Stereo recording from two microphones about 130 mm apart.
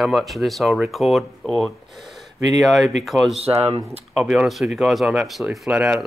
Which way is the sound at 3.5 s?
15° right (ahead or behind).